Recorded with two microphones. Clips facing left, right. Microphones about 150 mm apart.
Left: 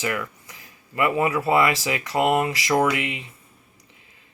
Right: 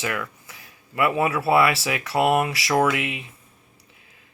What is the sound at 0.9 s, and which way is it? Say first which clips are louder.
Speech: even; 10° right (ahead or behind).